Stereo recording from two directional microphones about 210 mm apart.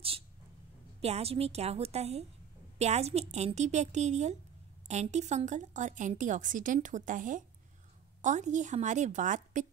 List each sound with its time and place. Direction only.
1.0 s a woman's voice: 30° right (ahead or behind)